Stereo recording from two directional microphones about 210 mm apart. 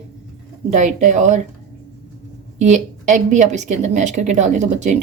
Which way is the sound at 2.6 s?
35° right (ahead or behind).